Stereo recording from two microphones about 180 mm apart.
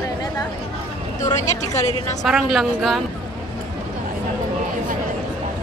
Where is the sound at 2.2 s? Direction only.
Centre (ahead or behind).